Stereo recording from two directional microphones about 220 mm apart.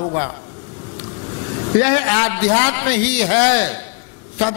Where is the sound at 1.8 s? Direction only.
15° left (ahead or behind).